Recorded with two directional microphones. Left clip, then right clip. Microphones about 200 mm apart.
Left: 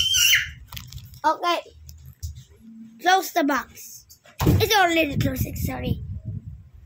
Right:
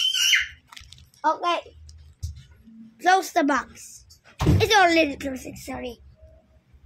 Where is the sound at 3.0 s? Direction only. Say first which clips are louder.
Even; 5° right (ahead or behind).